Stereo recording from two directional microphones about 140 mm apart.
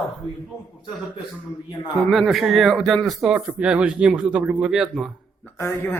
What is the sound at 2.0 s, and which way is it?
Speech, centre (ahead or behind).